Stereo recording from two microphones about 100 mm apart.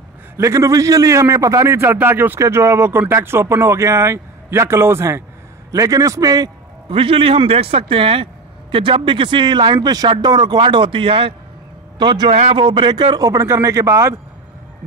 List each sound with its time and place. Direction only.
0.4 s speech: 30° right (ahead or behind)
5.7 s a man's voice: 35° right (ahead or behind)
6.9 s a man's voice: 65° right (ahead or behind)
12.0 s speech: 50° right (ahead or behind)
12.3 s a man's voice: 70° right (ahead or behind); by 14.2 s 25° right (ahead or behind)